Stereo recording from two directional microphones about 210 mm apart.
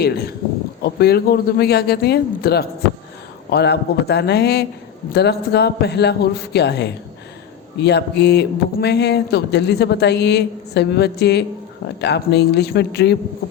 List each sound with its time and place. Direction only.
0.0 s speech: 50° left (ahead or behind)